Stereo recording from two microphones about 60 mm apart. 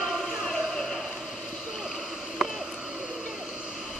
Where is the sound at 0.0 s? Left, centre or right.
Centre.